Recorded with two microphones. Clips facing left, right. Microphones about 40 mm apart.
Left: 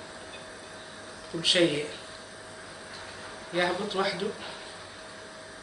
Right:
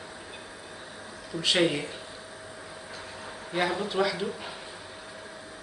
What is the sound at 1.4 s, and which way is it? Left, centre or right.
Speech, centre.